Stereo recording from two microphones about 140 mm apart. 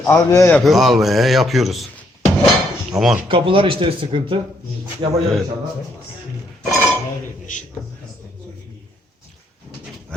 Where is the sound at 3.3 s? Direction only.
40° right (ahead or behind).